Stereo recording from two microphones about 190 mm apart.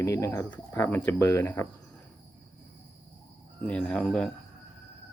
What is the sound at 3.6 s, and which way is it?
Speech, 5° left (ahead or behind).